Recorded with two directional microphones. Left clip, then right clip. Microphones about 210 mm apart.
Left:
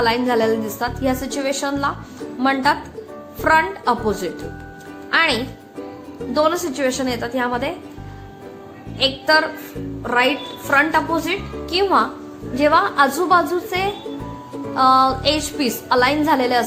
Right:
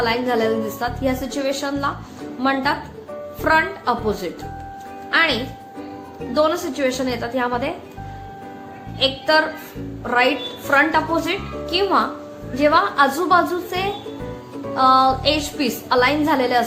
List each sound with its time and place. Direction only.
0.0 s a woman's voice: 20° left (ahead or behind)
9.0 s a woman's voice: 25° left (ahead or behind)